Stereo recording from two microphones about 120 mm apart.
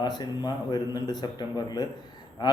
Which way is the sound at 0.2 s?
35° left (ahead or behind).